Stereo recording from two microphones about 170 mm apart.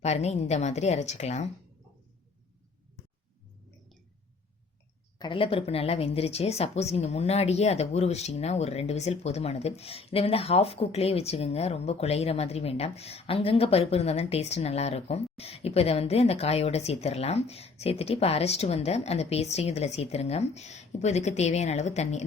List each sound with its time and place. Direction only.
0.0 s a woman's voice: 40° left (ahead or behind)
5.2 s a woman's voice: 30° left (ahead or behind)